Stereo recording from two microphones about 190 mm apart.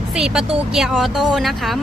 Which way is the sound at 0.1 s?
5° right (ahead or behind).